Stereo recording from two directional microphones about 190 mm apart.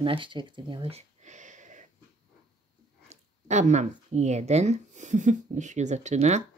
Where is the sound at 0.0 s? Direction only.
25° right (ahead or behind).